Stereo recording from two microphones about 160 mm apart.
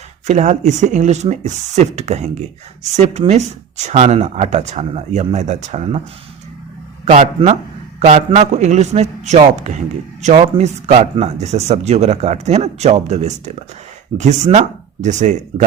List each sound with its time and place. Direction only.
0.3 s speech: 45° right (ahead or behind)
7.0 s speech: 50° right (ahead or behind)